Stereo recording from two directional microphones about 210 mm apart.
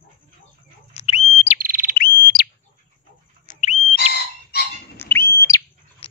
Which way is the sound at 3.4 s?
35° left (ahead or behind).